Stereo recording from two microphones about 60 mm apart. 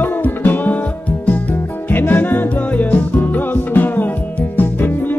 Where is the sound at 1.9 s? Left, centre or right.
Left.